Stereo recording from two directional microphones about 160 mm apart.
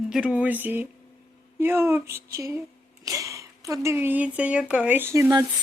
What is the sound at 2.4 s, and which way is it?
Speech, 15° right (ahead or behind).